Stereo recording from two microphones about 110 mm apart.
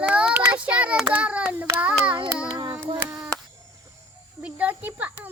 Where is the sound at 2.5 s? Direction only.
40° right (ahead or behind).